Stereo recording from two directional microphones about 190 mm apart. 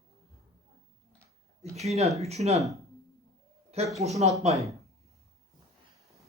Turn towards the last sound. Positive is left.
turn(degrees=-35)  # may be behind; listen again after turning